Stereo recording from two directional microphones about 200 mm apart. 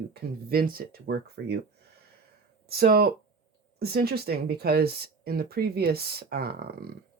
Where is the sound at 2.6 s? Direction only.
50° right (ahead or behind).